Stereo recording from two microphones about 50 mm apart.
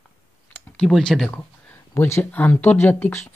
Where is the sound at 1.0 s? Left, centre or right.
Centre.